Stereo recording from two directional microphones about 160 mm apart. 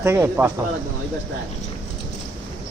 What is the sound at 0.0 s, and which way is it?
Speech, 15° right (ahead or behind).